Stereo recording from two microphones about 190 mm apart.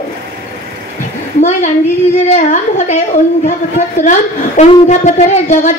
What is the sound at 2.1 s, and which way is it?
A woman's voice, 35° left (ahead or behind).